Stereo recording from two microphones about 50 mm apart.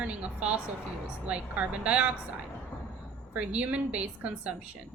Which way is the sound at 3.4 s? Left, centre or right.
Right.